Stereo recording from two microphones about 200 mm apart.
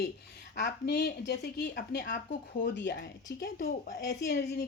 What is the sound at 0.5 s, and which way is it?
A woman's voice, 55° left (ahead or behind).